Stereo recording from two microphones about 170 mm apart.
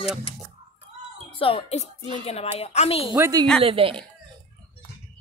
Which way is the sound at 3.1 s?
20° right (ahead or behind).